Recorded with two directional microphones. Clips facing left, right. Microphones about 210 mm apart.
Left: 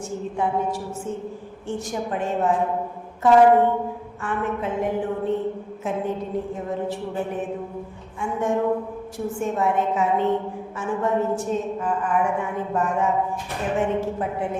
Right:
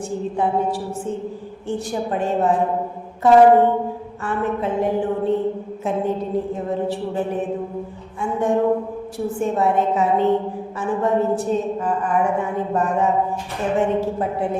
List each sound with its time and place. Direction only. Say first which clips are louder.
0.1 s a woman's voice: right 3 dB; 35° right (ahead or behind)